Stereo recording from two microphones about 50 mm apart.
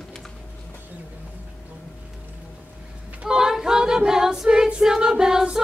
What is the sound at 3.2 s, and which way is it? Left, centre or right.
Choir, centre.